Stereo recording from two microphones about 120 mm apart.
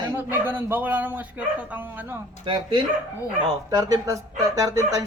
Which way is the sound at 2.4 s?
45° right (ahead or behind).